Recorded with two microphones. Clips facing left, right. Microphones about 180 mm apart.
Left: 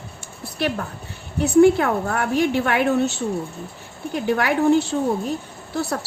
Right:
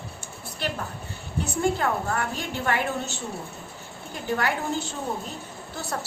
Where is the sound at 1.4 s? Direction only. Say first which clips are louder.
Left 11 dB; 65° left (ahead or behind).